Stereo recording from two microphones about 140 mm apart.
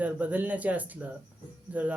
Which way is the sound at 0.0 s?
10° right (ahead or behind).